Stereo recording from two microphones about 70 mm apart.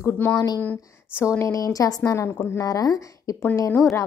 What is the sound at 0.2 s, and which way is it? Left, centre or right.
Speech, left.